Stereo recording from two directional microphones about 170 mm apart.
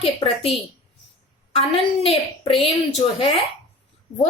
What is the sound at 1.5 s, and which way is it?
Speech, 35° left (ahead or behind).